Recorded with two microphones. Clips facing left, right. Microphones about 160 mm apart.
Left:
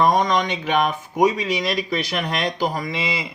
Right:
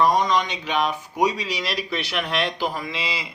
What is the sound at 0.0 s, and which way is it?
Speech, 50° left (ahead or behind).